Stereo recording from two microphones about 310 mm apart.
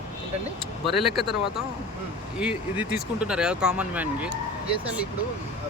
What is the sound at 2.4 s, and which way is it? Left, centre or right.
Speech, centre.